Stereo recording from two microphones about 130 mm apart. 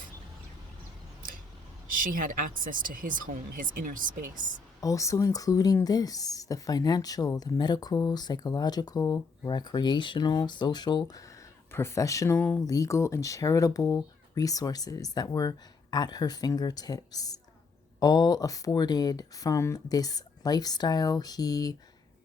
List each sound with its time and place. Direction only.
2.6 s speech: 90° right
4.8 s speech: 25° left (ahead or behind)
11.7 s speech: 20° left (ahead or behind)